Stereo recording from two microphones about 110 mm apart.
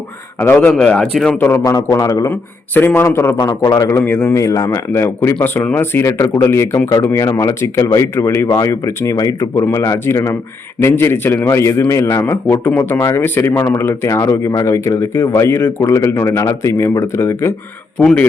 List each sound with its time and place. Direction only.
0.3 s speech: 15° left (ahead or behind)
0.7 s speech: 5° left (ahead or behind)
1.4 s speech: 20° left (ahead or behind)
1.6 s a man's voice: 30° left (ahead or behind)
2.3 s speech: 15° left (ahead or behind)
3.3 s a man's voice: 40° left (ahead or behind)
17.9 s speech: 10° left (ahead or behind)